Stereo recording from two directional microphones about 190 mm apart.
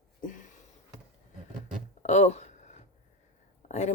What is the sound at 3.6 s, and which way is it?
Speech, 40° left (ahead or behind).